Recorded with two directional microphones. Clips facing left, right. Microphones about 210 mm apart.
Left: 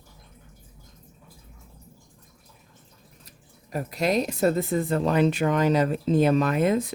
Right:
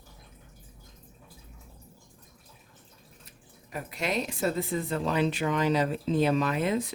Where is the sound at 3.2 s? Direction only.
40° left (ahead or behind).